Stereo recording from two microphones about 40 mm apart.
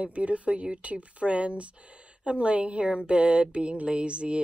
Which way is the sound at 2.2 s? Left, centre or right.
Right.